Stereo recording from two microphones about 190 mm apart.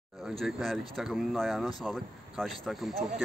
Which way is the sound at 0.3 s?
Centre (ahead or behind).